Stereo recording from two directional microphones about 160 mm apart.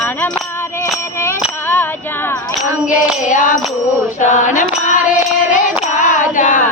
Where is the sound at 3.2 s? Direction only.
55° left (ahead or behind).